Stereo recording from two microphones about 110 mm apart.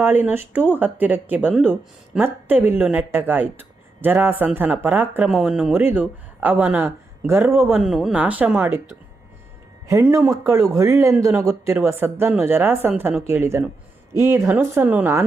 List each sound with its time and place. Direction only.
0.0 s speech: 20° right (ahead or behind)
5.3 s speech: 5° right (ahead or behind)
5.7 s speech: 15° right (ahead or behind)
7.8 s speech: 5° right (ahead or behind)
8.2 s speech: 15° right (ahead or behind)
10.2 s speech: 30° right (ahead or behind)